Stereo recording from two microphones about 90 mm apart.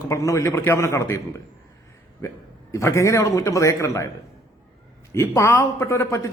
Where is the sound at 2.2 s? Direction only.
35° left (ahead or behind).